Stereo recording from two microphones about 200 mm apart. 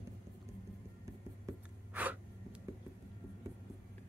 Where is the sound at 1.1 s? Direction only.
10° right (ahead or behind).